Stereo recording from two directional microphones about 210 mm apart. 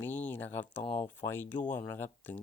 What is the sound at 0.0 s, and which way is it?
Speech, 10° left (ahead or behind).